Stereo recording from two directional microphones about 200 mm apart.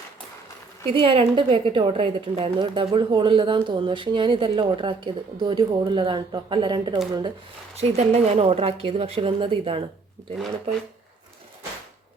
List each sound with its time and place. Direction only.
0.9 s a woman's voice: 25° right (ahead or behind)